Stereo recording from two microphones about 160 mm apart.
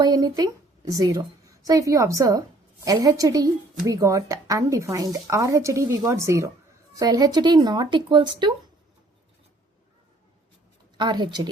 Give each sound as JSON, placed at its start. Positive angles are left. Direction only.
{"t": 0.0, "sound": "a woman's voice", "side_deg": -25}
{"t": 10.9, "sound": "a woman's voice", "side_deg": -30}